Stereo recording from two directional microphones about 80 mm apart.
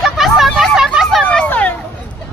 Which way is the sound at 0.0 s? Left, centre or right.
Centre.